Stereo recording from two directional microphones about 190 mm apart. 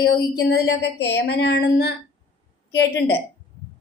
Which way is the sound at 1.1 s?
60° left (ahead or behind).